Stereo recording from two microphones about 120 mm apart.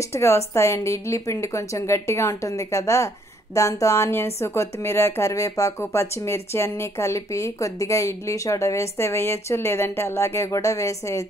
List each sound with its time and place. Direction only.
0.1 s a woman's voice: 25° left (ahead or behind)